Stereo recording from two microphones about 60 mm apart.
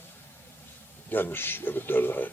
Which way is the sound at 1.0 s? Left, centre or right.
Left.